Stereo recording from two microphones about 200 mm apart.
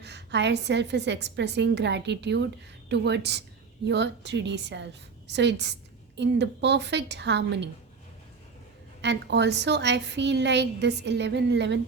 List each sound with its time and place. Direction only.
0.0 s a woman's voice: 60° right (ahead or behind)
9.0 s a woman's voice: 60° right (ahead or behind)